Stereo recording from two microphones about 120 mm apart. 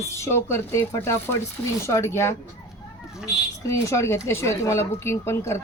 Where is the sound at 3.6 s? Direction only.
25° left (ahead or behind).